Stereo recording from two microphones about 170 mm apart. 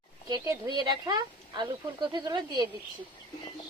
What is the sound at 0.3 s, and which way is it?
Speech, 20° right (ahead or behind).